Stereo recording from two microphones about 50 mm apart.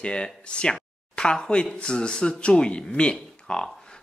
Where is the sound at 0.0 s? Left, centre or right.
Centre.